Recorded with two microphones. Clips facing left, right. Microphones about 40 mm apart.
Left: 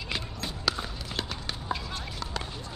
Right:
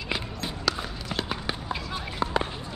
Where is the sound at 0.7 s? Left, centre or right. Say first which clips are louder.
Right 2 dB; centre.